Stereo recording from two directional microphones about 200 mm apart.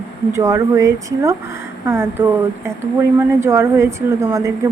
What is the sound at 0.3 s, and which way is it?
A woman's voice, 15° right (ahead or behind).